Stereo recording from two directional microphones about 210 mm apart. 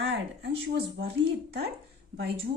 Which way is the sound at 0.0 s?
55° right (ahead or behind).